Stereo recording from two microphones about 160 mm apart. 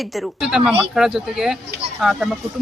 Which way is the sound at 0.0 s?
Centre (ahead or behind).